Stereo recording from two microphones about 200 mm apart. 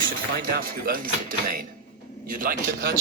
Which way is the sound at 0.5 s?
45° right (ahead or behind).